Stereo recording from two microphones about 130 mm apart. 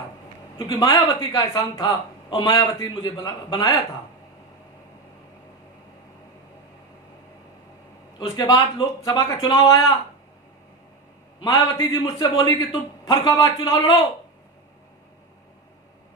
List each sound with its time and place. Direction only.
0.8 s a man's voice: 30° left (ahead or behind)
8.2 s a man's voice: 30° left (ahead or behind)
11.3 s a man's voice: 30° left (ahead or behind)